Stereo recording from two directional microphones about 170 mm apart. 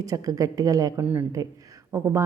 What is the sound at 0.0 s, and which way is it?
A woman's voice, 20° right (ahead or behind).